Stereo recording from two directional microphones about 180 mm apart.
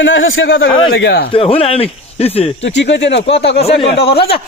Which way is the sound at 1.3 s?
35° left (ahead or behind).